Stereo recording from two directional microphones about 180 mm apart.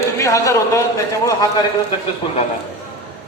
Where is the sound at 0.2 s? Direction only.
15° left (ahead or behind).